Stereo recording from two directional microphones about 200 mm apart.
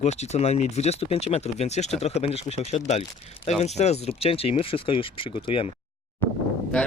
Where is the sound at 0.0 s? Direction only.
35° left (ahead or behind).